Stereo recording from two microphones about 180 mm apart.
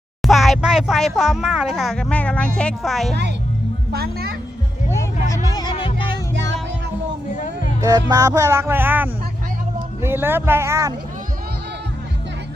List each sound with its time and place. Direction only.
0.2 s speech: centre (ahead or behind)
3.9 s speech: 60° right (ahead or behind)
5.3 s music: 20° left (ahead or behind)
6.3 s music: 85° right
7.3 s music: 45° left (ahead or behind)
7.8 s music: 20° right (ahead or behind)